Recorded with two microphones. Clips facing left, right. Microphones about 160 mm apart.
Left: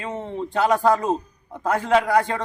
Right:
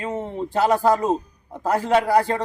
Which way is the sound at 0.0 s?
5° right (ahead or behind).